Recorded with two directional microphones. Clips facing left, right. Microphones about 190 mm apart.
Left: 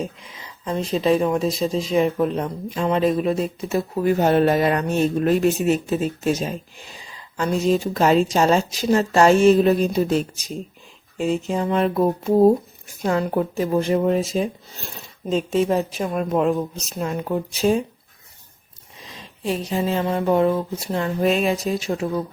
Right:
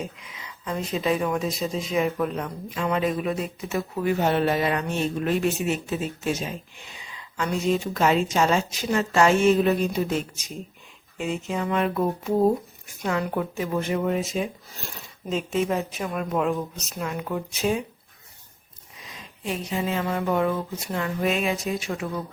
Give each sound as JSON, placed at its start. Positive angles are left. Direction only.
{"t": 0.2, "sound": "speech", "side_deg": 30}
{"t": 19.0, "sound": "speech", "side_deg": 30}